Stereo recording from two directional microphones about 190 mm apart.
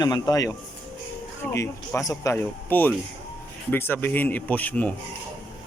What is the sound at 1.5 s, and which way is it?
Speech, 15° left (ahead or behind).